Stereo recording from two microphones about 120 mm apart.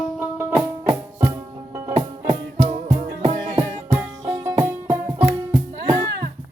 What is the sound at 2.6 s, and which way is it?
Music, 60° right (ahead or behind).